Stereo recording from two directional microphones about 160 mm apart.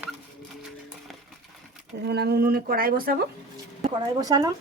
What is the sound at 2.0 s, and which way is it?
Speech, 90° right.